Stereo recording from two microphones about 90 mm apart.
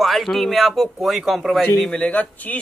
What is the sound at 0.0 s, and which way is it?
A man's voice, centre (ahead or behind).